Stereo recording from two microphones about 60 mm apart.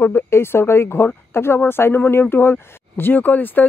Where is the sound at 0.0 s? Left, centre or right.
Left.